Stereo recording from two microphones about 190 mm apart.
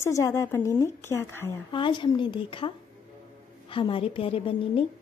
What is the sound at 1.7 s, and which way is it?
Speech, 25° left (ahead or behind).